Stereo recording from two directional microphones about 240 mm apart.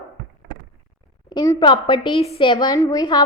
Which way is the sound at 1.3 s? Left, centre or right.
Centre.